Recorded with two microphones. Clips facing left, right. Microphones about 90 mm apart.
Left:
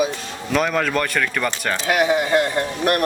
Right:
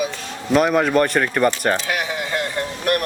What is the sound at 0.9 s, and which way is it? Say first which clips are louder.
Speech: right 4 dB; 35° right (ahead or behind).